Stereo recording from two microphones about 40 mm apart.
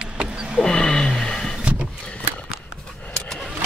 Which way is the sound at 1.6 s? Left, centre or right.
Right.